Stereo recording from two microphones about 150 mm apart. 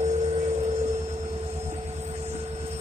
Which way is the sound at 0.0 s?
50° right (ahead or behind).